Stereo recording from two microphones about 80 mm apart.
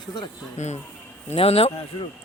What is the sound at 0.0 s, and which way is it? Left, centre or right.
Speech, left.